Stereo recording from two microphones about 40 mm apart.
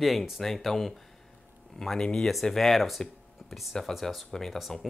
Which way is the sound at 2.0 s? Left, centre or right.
Centre.